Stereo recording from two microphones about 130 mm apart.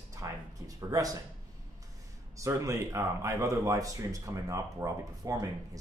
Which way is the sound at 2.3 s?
25° right (ahead or behind).